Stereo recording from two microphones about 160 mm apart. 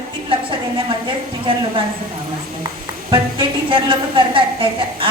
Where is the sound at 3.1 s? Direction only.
30° right (ahead or behind).